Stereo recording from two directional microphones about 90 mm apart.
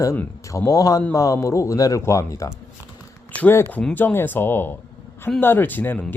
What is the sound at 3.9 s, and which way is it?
Speech, 25° left (ahead or behind).